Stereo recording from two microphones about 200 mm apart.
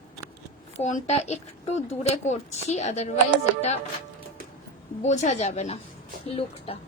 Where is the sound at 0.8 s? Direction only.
35° left (ahead or behind).